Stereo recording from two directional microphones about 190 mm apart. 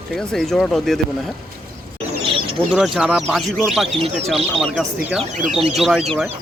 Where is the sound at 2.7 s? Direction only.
Centre (ahead or behind).